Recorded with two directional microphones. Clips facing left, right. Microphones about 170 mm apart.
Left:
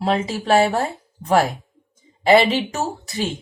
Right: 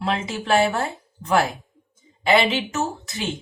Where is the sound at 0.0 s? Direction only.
35° left (ahead or behind).